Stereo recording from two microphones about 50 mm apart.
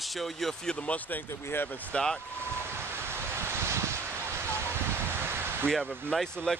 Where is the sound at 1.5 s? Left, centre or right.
Left.